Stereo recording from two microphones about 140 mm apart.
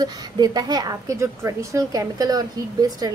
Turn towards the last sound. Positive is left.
turn(degrees=-25)  # may be behind; listen again after turning